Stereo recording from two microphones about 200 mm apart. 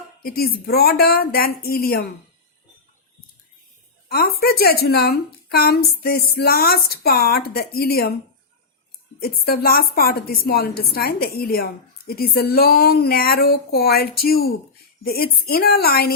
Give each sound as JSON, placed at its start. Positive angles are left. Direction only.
{"t": 0.2, "sound": "a woman's voice", "side_deg": 50}
{"t": 4.1, "sound": "a woman's voice", "side_deg": 50}
{"t": 9.2, "sound": "a woman's voice", "side_deg": 50}